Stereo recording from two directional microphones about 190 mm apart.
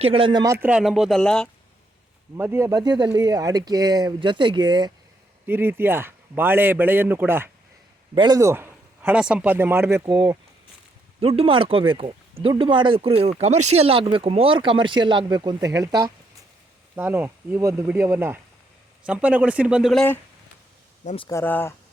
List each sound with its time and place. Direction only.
0.0 s speech: 30° right (ahead or behind); by 1.5 s 5° left (ahead or behind)
2.3 s speech: 15° right (ahead or behind)
5.5 s speech: 10° right (ahead or behind)
8.1 s speech: 25° right (ahead or behind)
11.2 s speech: 30° right (ahead or behind); by 20.1 s 5° left (ahead or behind)
21.0 s speech: 40° left (ahead or behind)
21.2 s speech: 10° left (ahead or behind)